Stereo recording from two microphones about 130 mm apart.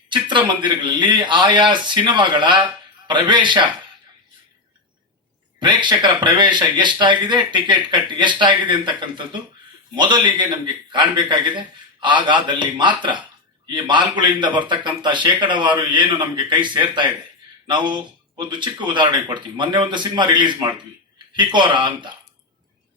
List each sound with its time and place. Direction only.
0.1 s a man's voice: 35° right (ahead or behind)
5.5 s a man's voice: 35° right (ahead or behind)